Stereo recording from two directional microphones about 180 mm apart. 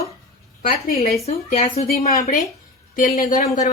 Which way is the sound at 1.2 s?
35° left (ahead or behind).